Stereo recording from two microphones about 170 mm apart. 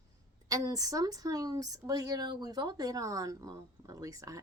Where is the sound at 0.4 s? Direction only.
20° right (ahead or behind).